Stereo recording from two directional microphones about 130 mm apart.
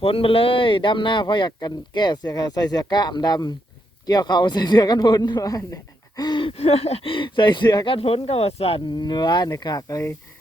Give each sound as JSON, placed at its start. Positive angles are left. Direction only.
{"t": 0.0, "sound": "speech", "side_deg": 45}
{"t": 9.0, "sound": "speech", "side_deg": 35}